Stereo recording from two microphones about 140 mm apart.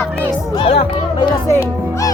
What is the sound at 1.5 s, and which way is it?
Speech, 20° left (ahead or behind).